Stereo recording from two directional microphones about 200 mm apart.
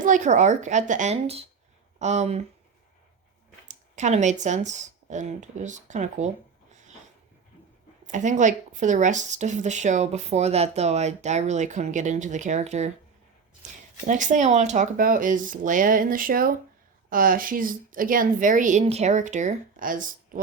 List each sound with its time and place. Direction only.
0.0 s speech: 40° right (ahead or behind)
3.7 s speech: 35° right (ahead or behind)
8.0 s speech: 40° right (ahead or behind)
14.1 s speech: 40° right (ahead or behind)